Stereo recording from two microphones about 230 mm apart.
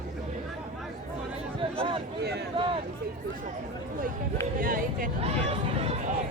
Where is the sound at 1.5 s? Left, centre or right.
Right.